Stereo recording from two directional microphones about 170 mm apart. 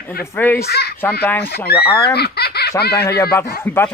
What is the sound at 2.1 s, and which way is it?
Baby laughter, 70° left (ahead or behind).